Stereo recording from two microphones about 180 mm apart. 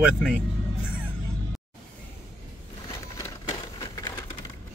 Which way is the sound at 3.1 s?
20° left (ahead or behind).